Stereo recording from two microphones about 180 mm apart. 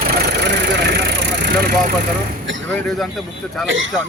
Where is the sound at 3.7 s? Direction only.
90° right.